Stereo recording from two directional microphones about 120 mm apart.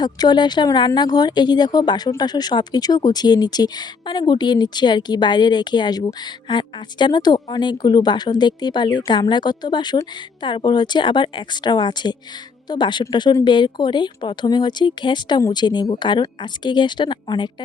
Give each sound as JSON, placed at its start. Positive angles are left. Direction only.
{"t": 0.0, "sound": "speech", "side_deg": 35}